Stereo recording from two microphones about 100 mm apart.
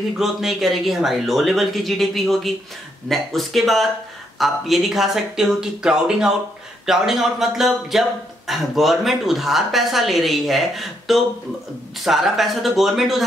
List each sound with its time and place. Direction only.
0.2 s speech: 5° right (ahead or behind)